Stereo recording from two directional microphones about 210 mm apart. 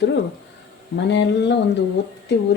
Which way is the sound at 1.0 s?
55° left (ahead or behind).